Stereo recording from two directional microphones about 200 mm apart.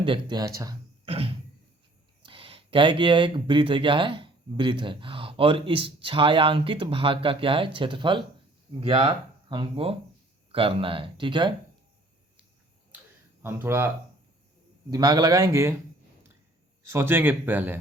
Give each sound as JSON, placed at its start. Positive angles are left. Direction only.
{"t": 0.0, "sound": "speech", "side_deg": -25}
{"t": 1.0, "sound": "music", "side_deg": -30}
{"t": 2.2, "sound": "speech", "side_deg": -25}
{"t": 13.4, "sound": "a man's voice", "side_deg": -10}
{"t": 16.8, "sound": "a man's voice", "side_deg": -10}